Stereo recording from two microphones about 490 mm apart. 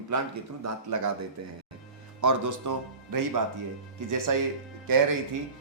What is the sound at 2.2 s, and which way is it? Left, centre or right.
Speech, right.